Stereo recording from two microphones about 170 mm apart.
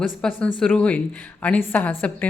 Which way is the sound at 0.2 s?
10° left (ahead or behind).